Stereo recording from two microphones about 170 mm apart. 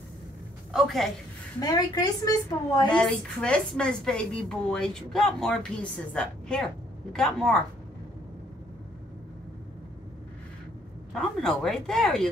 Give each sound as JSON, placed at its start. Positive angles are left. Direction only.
{"t": 0.7, "sound": "a woman's voice", "side_deg": 0}
{"t": 1.6, "sound": "a woman's voice", "side_deg": 20}
{"t": 2.9, "sound": "a woman's voice", "side_deg": 5}
{"t": 11.1, "sound": "a woman's voice", "side_deg": 5}